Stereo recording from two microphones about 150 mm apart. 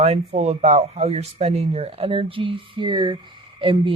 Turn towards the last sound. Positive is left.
turn(degrees=-35)  # may be behind; listen again after turning